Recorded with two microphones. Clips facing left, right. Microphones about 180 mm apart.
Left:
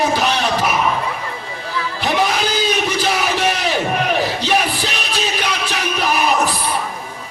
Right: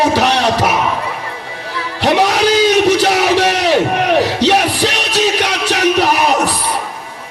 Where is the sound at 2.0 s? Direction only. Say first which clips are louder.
Right 7 dB; 75° right (ahead or behind).